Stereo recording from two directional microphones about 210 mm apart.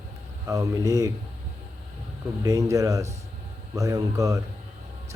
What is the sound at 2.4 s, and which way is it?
Speech, 15° right (ahead or behind).